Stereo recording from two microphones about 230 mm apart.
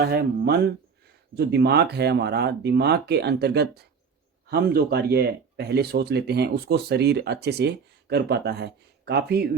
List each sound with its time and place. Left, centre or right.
0.0 s speech: right